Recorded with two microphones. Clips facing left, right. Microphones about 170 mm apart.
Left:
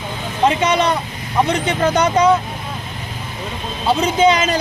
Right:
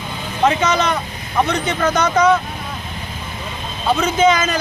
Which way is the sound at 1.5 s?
30° left (ahead or behind).